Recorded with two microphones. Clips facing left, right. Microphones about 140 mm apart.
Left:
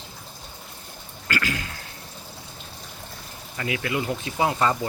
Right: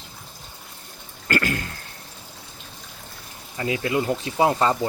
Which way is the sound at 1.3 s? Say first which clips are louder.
Right 4 dB; 50° right (ahead or behind).